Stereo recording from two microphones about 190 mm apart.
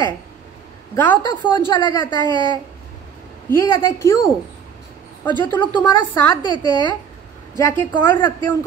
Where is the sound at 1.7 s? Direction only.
25° left (ahead or behind).